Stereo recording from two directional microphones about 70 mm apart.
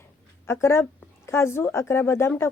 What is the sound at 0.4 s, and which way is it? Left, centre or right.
Speech, left.